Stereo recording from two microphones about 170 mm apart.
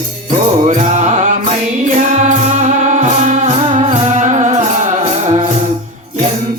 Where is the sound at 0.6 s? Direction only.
45° right (ahead or behind).